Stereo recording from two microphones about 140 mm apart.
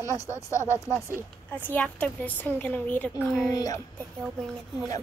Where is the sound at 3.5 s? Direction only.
25° left (ahead or behind).